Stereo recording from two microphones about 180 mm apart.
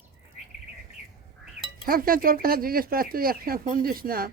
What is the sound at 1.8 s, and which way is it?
Speech, 55° right (ahead or behind).